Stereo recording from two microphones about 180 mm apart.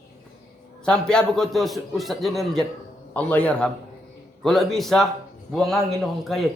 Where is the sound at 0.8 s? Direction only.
5° left (ahead or behind).